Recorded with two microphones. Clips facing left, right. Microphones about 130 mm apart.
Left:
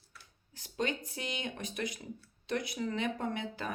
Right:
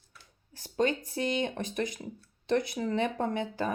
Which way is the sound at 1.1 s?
30° right (ahead or behind).